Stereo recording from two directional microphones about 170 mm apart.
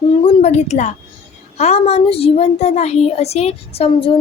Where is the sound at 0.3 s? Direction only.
40° left (ahead or behind).